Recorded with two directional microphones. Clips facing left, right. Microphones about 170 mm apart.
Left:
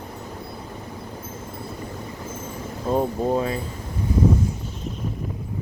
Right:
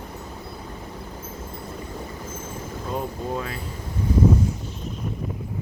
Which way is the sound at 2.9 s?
35° left (ahead or behind).